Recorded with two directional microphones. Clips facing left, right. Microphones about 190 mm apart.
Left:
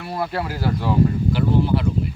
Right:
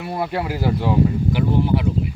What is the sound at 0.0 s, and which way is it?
Speech, 15° right (ahead or behind).